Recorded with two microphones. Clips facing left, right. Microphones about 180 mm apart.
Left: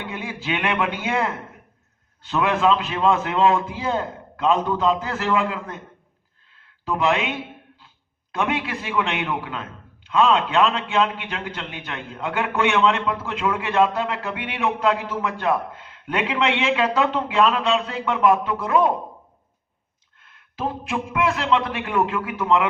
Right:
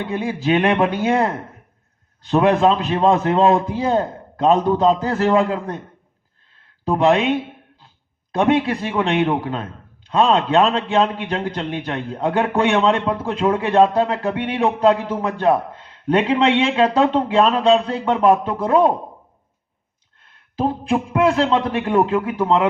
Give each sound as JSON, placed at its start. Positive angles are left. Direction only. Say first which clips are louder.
{"t": 0.0, "sound": "a man's voice", "louder": "right 9 dB", "side_deg": -35}
{"t": 6.8, "sound": "a man's voice", "louder": "right 6 dB", "side_deg": -35}
{"t": 20.2, "sound": "a man's voice", "louder": "right 6 dB", "side_deg": -30}